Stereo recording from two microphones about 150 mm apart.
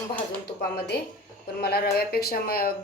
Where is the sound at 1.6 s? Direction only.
90° left.